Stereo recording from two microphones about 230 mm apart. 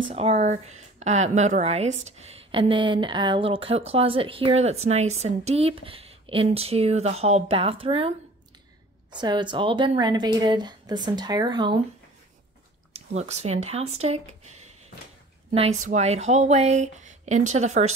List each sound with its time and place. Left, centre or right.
0.1 s speech: right
9.2 s speech: centre
12.9 s speech: right
15.9 s speech: right